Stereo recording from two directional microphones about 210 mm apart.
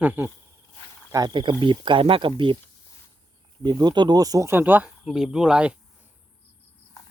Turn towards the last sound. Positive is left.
turn(degrees=-5)  # may be behind; listen again after turning